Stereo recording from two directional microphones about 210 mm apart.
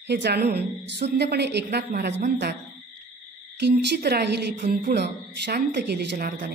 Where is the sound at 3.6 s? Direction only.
50° right (ahead or behind).